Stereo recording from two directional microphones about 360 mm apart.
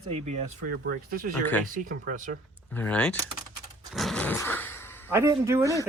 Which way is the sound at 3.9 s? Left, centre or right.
Centre.